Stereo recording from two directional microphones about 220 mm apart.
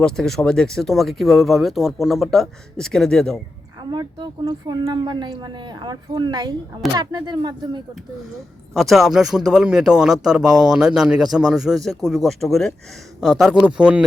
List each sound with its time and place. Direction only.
0.0 s speech: centre (ahead or behind)
3.9 s speech: 20° right (ahead or behind)
8.7 s speech: centre (ahead or behind)